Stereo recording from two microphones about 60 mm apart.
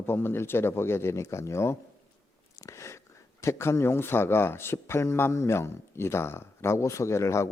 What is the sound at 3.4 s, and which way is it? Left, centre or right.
Speech, left.